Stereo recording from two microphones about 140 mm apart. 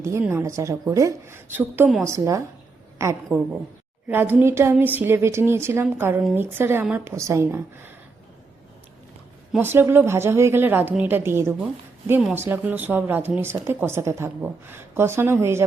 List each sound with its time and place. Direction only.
0.0 s a woman's voice: 20° right (ahead or behind)
4.1 s a woman's voice: 15° right (ahead or behind)
9.6 s a woman's voice: 15° right (ahead or behind)